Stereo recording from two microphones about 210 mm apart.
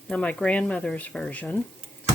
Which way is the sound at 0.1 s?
5° left (ahead or behind).